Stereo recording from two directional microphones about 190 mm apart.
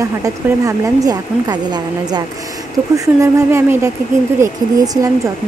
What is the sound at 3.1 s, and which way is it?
A woman's voice, 15° right (ahead or behind).